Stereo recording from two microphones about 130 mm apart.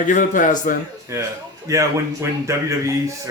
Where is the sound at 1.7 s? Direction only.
25° right (ahead or behind).